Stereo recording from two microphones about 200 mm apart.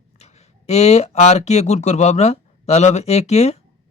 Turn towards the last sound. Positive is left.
turn(degrees=30)  # may be behind; listen again after turning